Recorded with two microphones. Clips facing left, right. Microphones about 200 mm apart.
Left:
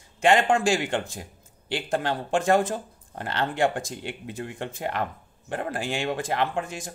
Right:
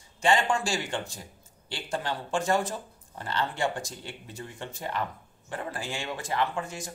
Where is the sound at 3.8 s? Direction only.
75° left (ahead or behind); by 6.3 s 50° left (ahead or behind).